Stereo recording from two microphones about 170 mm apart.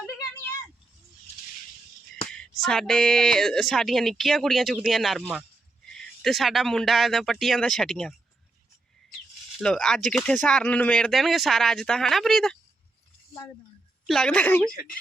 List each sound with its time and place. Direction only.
2.3 s speech: 5° left (ahead or behind)
9.6 s speech: centre (ahead or behind)
14.1 s speech: 5° left (ahead or behind)